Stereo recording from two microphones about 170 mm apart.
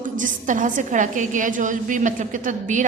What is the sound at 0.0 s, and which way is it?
A woman's voice, 50° right (ahead or behind).